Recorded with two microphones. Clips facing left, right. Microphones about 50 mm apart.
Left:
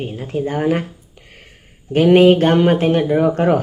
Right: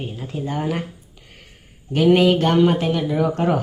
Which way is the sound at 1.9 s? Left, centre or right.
Left.